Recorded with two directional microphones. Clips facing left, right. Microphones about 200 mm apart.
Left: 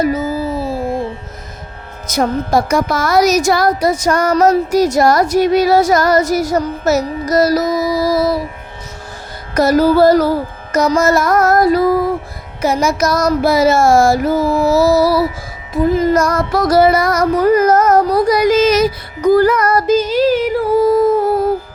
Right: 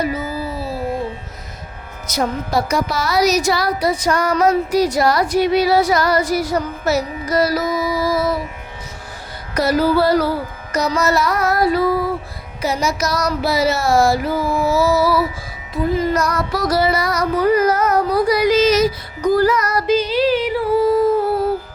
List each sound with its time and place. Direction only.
0.0 s music: 45° left (ahead or behind)
2.0 s speech: 50° left (ahead or behind)
9.6 s speech: 45° left (ahead or behind)
15.7 s child singing: 45° left (ahead or behind)